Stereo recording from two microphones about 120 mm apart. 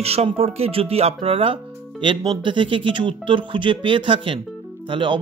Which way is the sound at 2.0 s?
40° right (ahead or behind).